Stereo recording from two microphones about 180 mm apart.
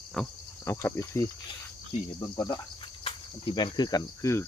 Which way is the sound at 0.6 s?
15° left (ahead or behind).